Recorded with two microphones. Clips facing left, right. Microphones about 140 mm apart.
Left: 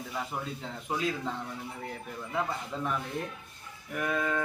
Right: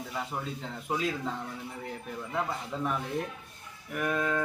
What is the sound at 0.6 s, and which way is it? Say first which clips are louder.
Speech: right 1 dB; centre (ahead or behind).